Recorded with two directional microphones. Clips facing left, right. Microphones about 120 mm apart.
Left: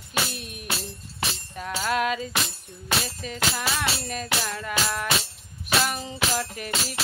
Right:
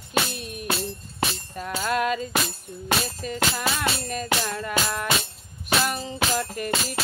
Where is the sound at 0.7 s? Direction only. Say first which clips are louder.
Right 6 dB; 55° right (ahead or behind).